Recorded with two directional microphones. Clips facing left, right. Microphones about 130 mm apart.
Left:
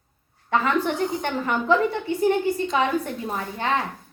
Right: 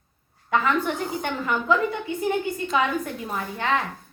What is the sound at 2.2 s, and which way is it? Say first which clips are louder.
Speech: left 5 dB; 35° left (ahead or behind).